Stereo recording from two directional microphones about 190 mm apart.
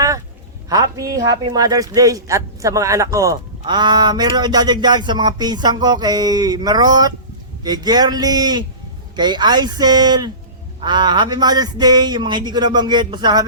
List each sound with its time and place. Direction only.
0.7 s a man's voice: 20° right (ahead or behind)